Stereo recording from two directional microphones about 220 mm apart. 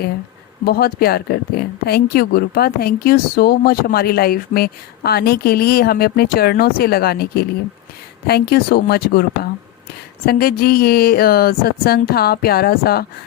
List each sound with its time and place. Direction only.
0.6 s speech: 45° left (ahead or behind)